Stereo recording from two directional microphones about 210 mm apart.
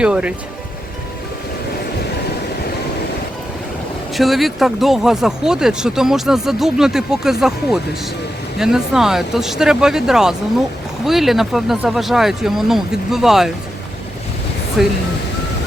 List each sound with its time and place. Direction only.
0.0 s speech: 5° right (ahead or behind)
4.1 s speech: centre (ahead or behind)
14.8 s speech: 5° right (ahead or behind)